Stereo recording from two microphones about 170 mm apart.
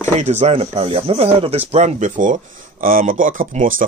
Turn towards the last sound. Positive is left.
turn(degrees=-50)  # may be behind; listen again after turning